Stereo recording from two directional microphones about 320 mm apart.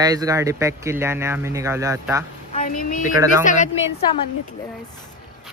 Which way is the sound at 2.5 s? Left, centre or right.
Left.